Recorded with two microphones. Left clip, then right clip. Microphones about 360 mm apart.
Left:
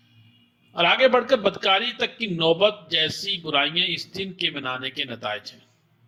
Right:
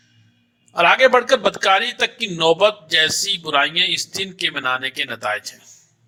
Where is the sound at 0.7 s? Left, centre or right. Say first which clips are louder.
Right 5 dB; right.